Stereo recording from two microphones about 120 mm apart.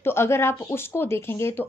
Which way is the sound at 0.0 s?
20° left (ahead or behind).